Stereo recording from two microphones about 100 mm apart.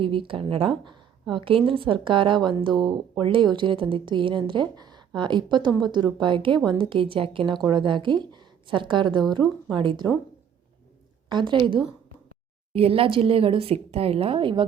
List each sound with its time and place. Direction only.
0.0 s speech: 60° right (ahead or behind)
7.6 s speech: 50° right (ahead or behind)
11.3 s speech: 50° right (ahead or behind)
12.7 s a woman's voice: 70° right (ahead or behind)